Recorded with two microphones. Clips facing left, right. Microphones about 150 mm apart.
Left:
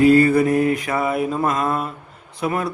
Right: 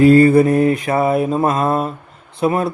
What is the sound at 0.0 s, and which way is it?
Mantra, 30° right (ahead or behind).